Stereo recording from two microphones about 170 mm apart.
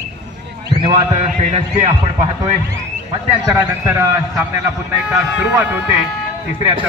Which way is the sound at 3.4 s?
15° right (ahead or behind).